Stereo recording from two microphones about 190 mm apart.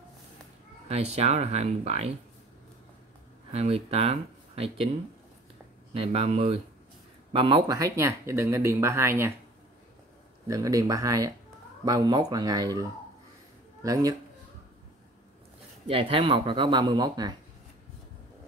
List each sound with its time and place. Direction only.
0.8 s speech: 35° right (ahead or behind)
3.5 s speech: 30° right (ahead or behind)
5.9 s speech: 35° right (ahead or behind); by 9.3 s 15° right (ahead or behind)
10.5 s speech: 20° right (ahead or behind)
13.8 s speech: 15° right (ahead or behind)
15.9 s speech: 30° right (ahead or behind)